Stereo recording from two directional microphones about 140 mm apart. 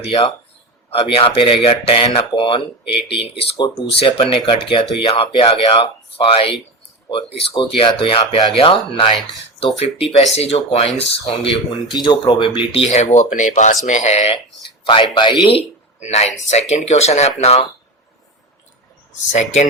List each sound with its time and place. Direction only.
0.1 s speech: 45° left (ahead or behind)
11.9 s speech: 30° left (ahead or behind); by 14.3 s 50° left (ahead or behind)
15.1 s speech: 35° left (ahead or behind)
19.3 s speech: 60° left (ahead or behind)